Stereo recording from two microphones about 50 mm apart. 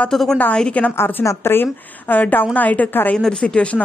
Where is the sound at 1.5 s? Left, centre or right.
Left.